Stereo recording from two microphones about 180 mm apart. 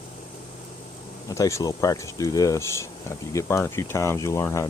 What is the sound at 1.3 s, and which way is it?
Speech, 15° left (ahead or behind).